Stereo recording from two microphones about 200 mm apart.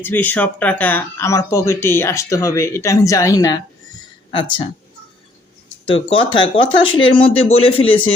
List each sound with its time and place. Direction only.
0.0 s speech: 10° left (ahead or behind); by 4.7 s 25° left (ahead or behind)
5.8 s speech: 25° left (ahead or behind)